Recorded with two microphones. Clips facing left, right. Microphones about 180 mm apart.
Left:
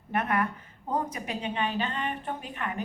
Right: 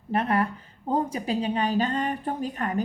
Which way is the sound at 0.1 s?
30° right (ahead or behind).